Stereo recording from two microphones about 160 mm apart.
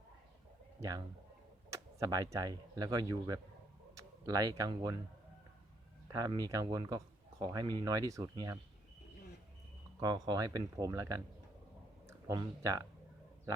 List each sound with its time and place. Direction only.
0.8 s speech: 25° right (ahead or behind)
6.1 s speech: 25° right (ahead or behind)
10.0 s speech: 25° right (ahead or behind)